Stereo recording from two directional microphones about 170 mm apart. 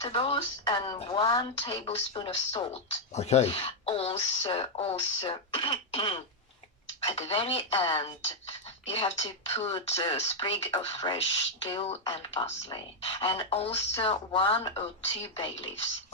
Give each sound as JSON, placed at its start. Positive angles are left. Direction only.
{"t": 0.0, "sound": "speech", "side_deg": 30}
{"t": 0.9, "sound": "speech", "side_deg": 35}